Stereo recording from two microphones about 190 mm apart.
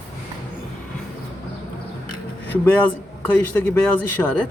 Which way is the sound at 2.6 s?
10° left (ahead or behind).